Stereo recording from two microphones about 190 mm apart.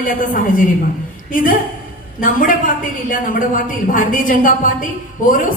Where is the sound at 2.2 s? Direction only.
45° left (ahead or behind).